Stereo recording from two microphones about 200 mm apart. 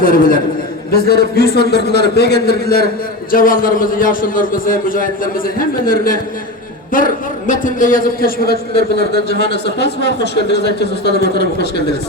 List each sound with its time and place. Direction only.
0.0 s a man's voice: 45° left (ahead or behind)